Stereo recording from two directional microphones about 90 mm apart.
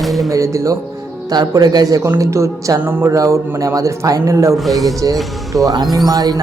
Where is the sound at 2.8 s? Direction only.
25° right (ahead or behind).